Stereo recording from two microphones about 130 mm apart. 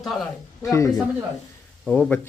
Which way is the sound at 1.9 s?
10° left (ahead or behind).